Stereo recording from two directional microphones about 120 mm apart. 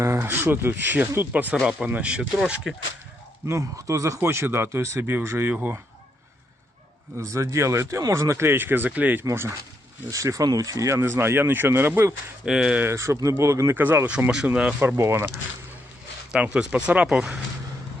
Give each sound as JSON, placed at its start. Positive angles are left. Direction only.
{"t": 0.0, "sound": "speech", "side_deg": -20}
{"t": 3.4, "sound": "speech", "side_deg": -25}
{"t": 7.2, "sound": "speech", "side_deg": -25}
{"t": 12.5, "sound": "speech", "side_deg": -5}
{"t": 12.9, "sound": "speech", "side_deg": -25}
{"t": 14.8, "sound": "speech", "side_deg": -20}
{"t": 16.3, "sound": "speech", "side_deg": -5}